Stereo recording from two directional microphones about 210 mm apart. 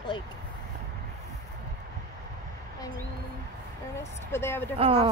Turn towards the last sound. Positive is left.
turn(degrees=-30)  # may be behind; listen again after turning